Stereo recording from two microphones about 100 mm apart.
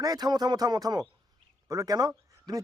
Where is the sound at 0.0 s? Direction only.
40° right (ahead or behind).